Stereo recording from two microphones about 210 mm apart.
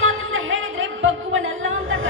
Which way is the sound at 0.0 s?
70° right (ahead or behind).